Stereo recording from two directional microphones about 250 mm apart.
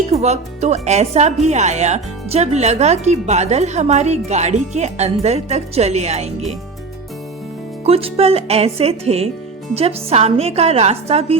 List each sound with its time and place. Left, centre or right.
0.1 s speech: right
7.9 s speech: right